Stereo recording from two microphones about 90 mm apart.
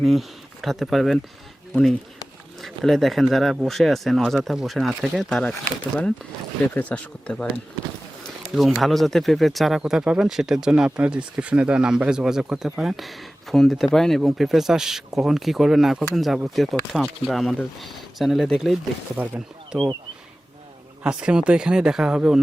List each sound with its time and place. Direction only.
0.0 s speech: centre (ahead or behind)
6.7 s speech: 15° left (ahead or behind)
8.5 s speech: centre (ahead or behind)
19.1 s speech: 15° right (ahead or behind)
21.0 s speech: 10° right (ahead or behind)